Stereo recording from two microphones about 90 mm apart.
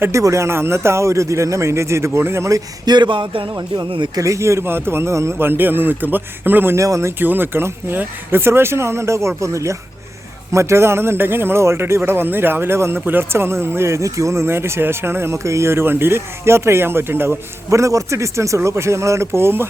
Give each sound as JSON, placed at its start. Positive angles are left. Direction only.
{"t": 0.0, "sound": "a man's voice", "side_deg": -35}
{"t": 2.8, "sound": "a sound", "side_deg": -55}
{"t": 4.1, "sound": "a man's voice", "side_deg": -35}
{"t": 6.7, "sound": "a man's voice", "side_deg": -35}
{"t": 7.2, "sound": "a man's voice", "side_deg": -20}